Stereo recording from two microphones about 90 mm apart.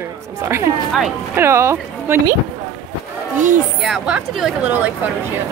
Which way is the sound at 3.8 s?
5° right (ahead or behind).